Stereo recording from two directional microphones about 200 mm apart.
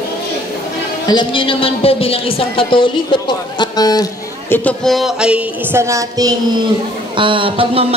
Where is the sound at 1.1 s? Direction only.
25° left (ahead or behind); by 6.3 s 15° right (ahead or behind).